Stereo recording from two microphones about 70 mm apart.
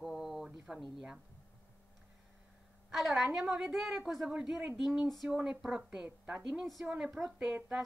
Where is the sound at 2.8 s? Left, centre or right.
Centre.